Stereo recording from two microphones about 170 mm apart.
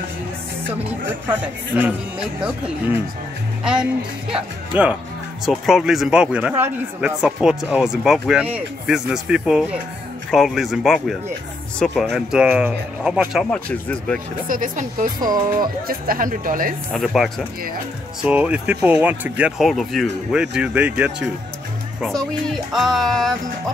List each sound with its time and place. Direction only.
2.4 s speech: 5° right (ahead or behind)
4.3 s speech: 10° right (ahead or behind); by 14.2 s 5° left (ahead or behind)
14.5 s speech: 50° right (ahead or behind)
15.1 s speech: 20° right (ahead or behind)
15.5 s speech: 55° right (ahead or behind)
16.9 s speech: centre (ahead or behind)